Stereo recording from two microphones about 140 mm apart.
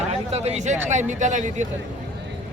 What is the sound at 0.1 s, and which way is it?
Speech, 50° right (ahead or behind).